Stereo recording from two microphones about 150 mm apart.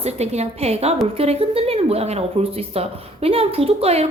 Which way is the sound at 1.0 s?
40° right (ahead or behind).